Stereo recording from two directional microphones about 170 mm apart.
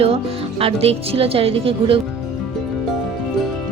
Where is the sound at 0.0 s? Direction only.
35° right (ahead or behind).